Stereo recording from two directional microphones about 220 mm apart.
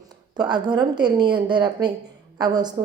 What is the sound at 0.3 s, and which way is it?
A woman's voice, 20° right (ahead or behind).